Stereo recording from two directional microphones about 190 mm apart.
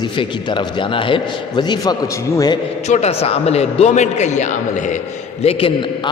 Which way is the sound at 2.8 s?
35° left (ahead or behind).